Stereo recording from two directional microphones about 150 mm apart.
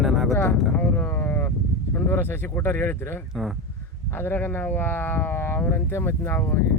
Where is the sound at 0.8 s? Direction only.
10° left (ahead or behind).